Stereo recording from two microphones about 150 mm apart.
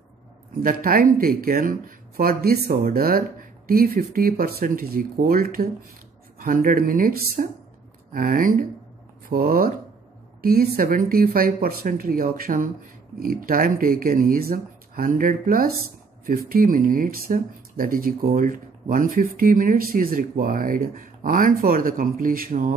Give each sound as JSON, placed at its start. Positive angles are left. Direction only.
{"t": 0.6, "sound": "speech", "side_deg": -70}